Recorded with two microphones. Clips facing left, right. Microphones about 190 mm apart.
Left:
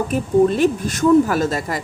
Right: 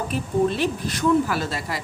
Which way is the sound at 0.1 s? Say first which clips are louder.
Left 7 dB; 45° left (ahead or behind).